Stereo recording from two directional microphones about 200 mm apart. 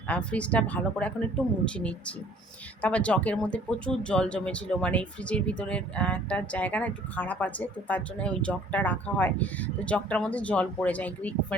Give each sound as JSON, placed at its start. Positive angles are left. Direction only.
{"t": 0.1, "sound": "speech", "side_deg": 5}